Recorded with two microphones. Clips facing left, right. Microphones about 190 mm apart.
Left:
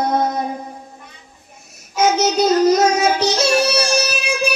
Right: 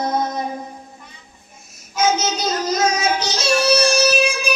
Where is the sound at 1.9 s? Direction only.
65° left (ahead or behind).